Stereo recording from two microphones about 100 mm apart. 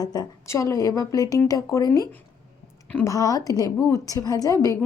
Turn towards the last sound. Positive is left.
turn(degrees=30)  # may be behind; listen again after turning